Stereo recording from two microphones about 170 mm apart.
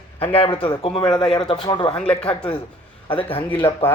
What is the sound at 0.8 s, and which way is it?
A man's voice, 35° left (ahead or behind).